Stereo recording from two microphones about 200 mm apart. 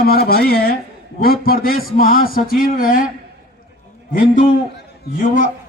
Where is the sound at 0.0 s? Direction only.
50° left (ahead or behind).